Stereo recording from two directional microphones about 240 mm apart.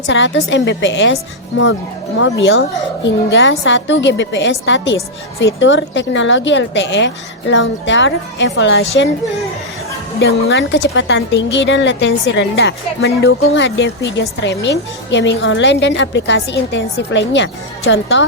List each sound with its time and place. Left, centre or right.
0.1 s speech: left
10.2 s speech: left